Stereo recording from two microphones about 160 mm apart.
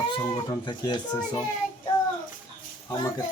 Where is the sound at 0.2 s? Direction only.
25° left (ahead or behind).